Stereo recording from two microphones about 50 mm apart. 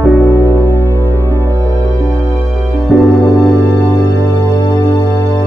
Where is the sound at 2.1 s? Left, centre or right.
Left.